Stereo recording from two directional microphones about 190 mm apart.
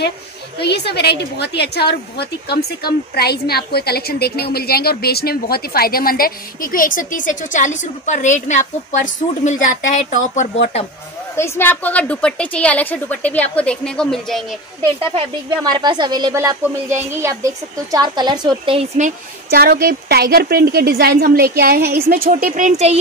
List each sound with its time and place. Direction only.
0.6 s a woman's voice: 60° left (ahead or behind); by 10.9 s 35° left (ahead or behind)
11.3 s a woman's voice: 15° left (ahead or behind)
14.8 s a woman's voice: 20° right (ahead or behind)
18.9 s a woman's voice: 45° right (ahead or behind)